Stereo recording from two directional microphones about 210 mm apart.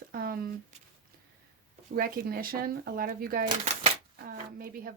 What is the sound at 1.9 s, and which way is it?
Speech, 45° right (ahead or behind).